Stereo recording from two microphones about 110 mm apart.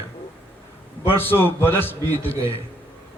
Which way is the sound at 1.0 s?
20° left (ahead or behind).